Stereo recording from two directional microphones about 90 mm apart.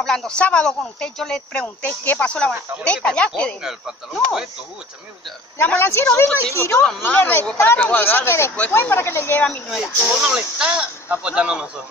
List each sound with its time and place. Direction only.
0.0 s speech: 5° left (ahead or behind)
3.6 s speech: 5° right (ahead or behind)
5.6 s speech: 25° left (ahead or behind)
9.7 s speech: 5° right (ahead or behind)